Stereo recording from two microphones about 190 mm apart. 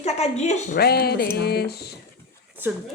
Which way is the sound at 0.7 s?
55° left (ahead or behind).